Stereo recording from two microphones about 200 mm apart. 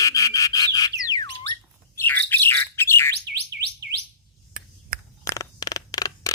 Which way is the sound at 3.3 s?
55° right (ahead or behind).